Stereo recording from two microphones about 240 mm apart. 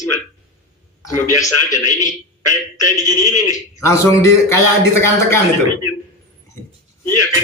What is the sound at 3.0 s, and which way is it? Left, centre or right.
Speech, left.